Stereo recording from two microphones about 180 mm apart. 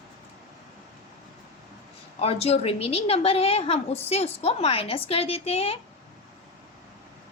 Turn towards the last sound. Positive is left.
turn(degrees=35)  # may be behind; listen again after turning